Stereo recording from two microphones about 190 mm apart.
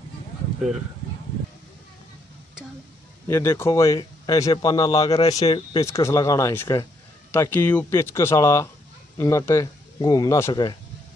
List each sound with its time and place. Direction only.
3.3 s a man's voice: 15° left (ahead or behind)